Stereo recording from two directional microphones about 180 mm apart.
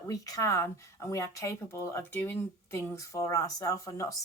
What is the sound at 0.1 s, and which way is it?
Speech, 20° left (ahead or behind).